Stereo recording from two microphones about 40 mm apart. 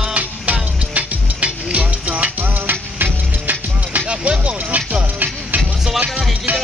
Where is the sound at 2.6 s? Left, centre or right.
Right.